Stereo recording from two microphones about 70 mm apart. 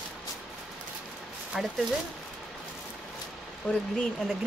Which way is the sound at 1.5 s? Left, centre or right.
Centre.